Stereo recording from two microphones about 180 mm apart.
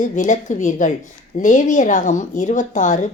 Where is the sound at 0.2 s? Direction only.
45° left (ahead or behind).